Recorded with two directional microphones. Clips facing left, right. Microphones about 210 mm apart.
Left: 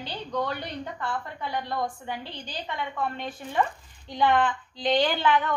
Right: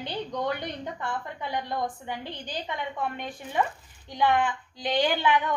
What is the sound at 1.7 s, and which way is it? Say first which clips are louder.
A woman's voice: left 1 dB; 15° right (ahead or behind).